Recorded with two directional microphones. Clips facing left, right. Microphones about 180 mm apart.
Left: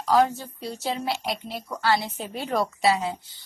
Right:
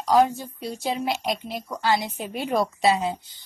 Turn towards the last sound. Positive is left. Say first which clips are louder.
# right 1 dB
turn(degrees=-20)  # may be behind; listen again after turning